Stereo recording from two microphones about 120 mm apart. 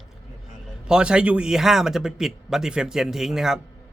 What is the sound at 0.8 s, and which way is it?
A man's voice, 5° right (ahead or behind).